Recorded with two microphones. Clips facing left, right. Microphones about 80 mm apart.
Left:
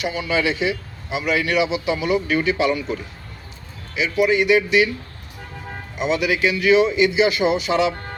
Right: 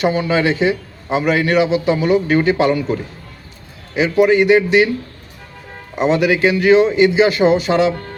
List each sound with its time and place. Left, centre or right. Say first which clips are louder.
0.0 s a man's voice: right 6 dB; right
3.9 s a man's voice: right 6 dB; right
6.0 s a man's voice: right 6 dB; right